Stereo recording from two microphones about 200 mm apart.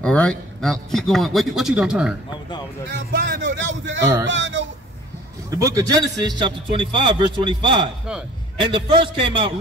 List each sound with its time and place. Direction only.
0.0 s speech: 5° left (ahead or behind)
2.9 s speech: 55° right (ahead or behind)
5.5 s a man's voice: 15° right (ahead or behind)